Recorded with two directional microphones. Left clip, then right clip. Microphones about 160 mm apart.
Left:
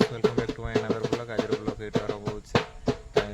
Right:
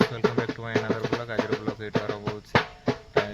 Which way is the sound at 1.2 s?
10° right (ahead or behind).